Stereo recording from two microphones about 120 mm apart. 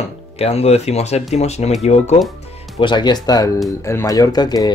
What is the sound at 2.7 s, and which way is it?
Speech, 40° left (ahead or behind).